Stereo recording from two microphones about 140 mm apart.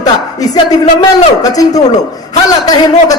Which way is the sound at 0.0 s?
25° left (ahead or behind).